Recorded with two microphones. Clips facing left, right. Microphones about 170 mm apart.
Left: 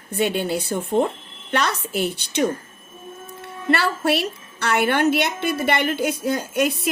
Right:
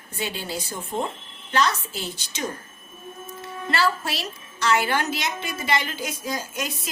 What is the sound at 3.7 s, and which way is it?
A woman's voice, 60° left (ahead or behind).